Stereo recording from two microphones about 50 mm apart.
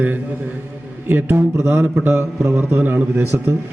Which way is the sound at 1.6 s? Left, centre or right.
Right.